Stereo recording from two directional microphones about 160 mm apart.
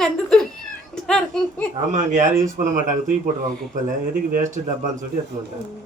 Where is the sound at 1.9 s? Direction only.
50° right (ahead or behind).